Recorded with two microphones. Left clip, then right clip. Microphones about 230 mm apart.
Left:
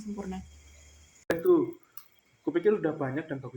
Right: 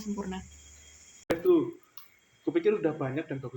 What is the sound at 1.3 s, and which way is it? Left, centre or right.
Speech, centre.